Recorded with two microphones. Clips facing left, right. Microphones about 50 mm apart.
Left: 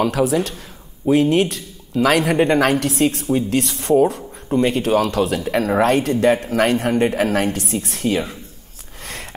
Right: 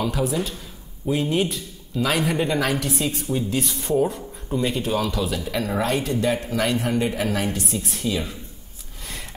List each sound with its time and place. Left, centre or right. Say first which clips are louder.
0.0 s speech: left 6 dB; left
2.3 s a woman's voice: left 7 dB; left
4.6 s speech: left 7 dB; left
5.4 s speech: left 7 dB; left